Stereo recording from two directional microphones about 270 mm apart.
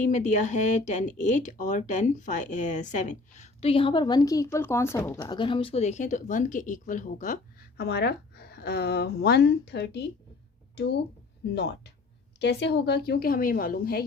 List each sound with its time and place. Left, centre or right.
0.0 s a woman's voice: left